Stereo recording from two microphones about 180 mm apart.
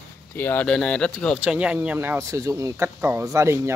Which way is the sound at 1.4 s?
5° right (ahead or behind).